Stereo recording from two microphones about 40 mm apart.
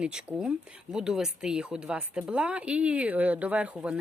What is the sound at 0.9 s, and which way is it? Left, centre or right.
Speech, centre.